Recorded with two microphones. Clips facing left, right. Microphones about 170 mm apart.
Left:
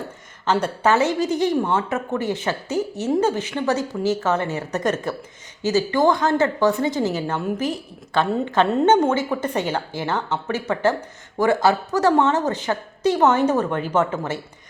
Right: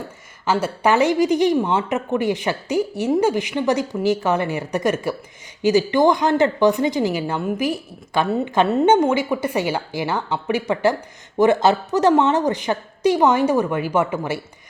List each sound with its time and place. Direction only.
0.4 s a woman's voice: 5° right (ahead or behind)